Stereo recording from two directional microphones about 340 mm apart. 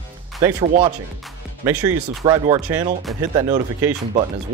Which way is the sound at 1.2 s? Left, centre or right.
Centre.